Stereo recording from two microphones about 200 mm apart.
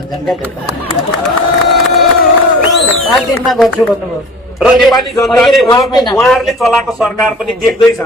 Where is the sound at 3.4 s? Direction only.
Centre (ahead or behind).